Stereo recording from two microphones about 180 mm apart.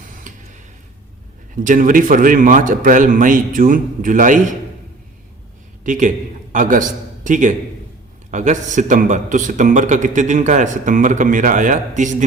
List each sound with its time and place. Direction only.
0.0 s tick-tock: 45° right (ahead or behind)
1.5 s a man's voice: 50° right (ahead or behind)
5.8 s a man's voice: 45° right (ahead or behind)